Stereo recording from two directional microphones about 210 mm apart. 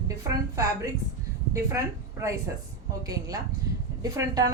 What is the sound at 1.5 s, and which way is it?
A woman's voice, 15° right (ahead or behind).